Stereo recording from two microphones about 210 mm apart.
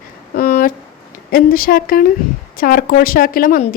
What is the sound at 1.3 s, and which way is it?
A woman's voice, 45° left (ahead or behind).